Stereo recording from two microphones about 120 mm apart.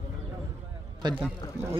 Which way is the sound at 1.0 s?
40° right (ahead or behind).